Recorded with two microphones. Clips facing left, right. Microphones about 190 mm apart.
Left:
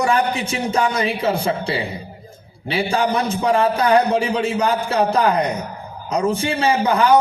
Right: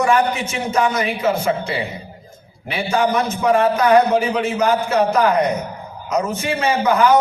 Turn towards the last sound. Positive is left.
turn(degrees=30)  # may be behind; listen again after turning